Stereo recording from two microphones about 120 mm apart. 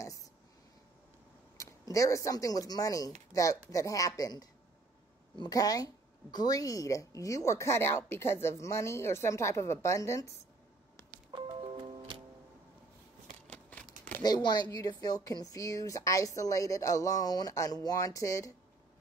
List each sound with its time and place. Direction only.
1.6 s speech: 25° left (ahead or behind)
11.3 s music: 40° right (ahead or behind)
13.5 s a sound: 10° left (ahead or behind)
14.2 s speech: 35° left (ahead or behind)